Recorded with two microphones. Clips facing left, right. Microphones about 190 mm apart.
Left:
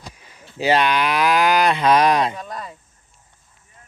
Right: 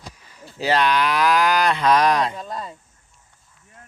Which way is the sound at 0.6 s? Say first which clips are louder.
Left 1 dB; 20° left (ahead or behind).